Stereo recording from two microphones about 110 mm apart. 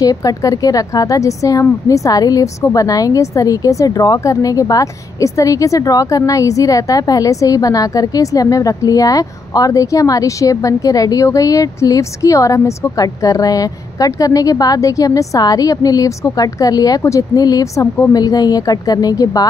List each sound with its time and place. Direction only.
0.0 s a woman's voice: 35° left (ahead or behind)